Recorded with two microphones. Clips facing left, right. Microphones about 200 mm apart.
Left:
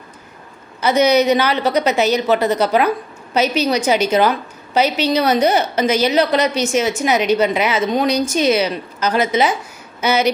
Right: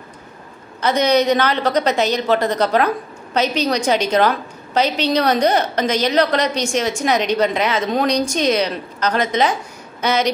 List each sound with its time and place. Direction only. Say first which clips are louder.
0.7 s a woman's voice: left 2 dB; 5° left (ahead or behind)